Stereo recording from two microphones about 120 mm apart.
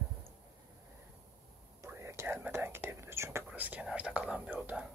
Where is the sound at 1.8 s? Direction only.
25° right (ahead or behind).